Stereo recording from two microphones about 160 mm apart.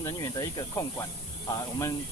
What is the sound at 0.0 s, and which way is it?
Speech, 20° left (ahead or behind).